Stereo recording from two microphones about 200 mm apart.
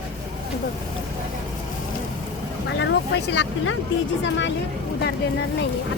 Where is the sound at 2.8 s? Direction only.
60° left (ahead or behind).